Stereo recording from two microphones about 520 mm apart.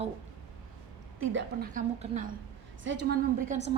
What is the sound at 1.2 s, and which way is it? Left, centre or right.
A woman's voice, right.